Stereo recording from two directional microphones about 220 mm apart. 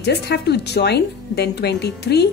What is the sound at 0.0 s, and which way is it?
Speech, 50° left (ahead or behind).